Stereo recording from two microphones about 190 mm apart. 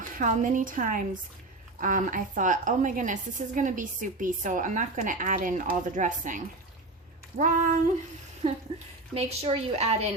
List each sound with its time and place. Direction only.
0.2 s a woman's voice: 40° right (ahead or behind)
9.1 s a woman's voice: 35° right (ahead or behind)